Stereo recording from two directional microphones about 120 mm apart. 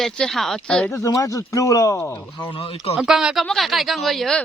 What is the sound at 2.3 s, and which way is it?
Speech, 40° left (ahead or behind).